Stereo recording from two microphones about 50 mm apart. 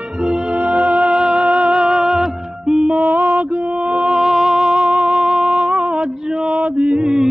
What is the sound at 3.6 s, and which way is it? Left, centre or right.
Music, centre.